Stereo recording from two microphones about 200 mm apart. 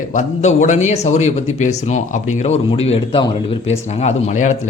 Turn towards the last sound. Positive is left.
turn(degrees=35)  # may be behind; listen again after turning